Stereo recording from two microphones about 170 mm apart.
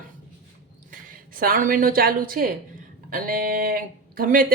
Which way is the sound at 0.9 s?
55° right (ahead or behind).